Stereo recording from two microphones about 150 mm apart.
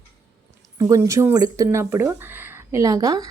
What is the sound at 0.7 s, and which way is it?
Speech, 20° right (ahead or behind).